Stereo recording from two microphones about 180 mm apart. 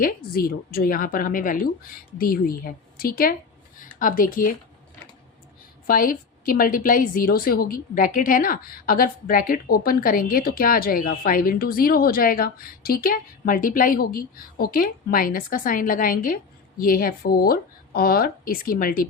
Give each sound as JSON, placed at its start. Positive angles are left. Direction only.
{"t": 0.0, "sound": "a woman's voice", "side_deg": 55}
{"t": 5.9, "sound": "a woman's voice", "side_deg": 50}